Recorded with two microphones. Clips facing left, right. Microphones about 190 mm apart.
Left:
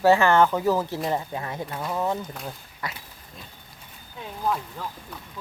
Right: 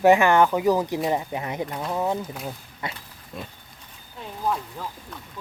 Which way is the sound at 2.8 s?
25° right (ahead or behind).